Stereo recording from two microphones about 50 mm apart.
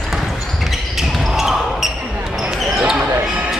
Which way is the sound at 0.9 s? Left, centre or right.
Centre.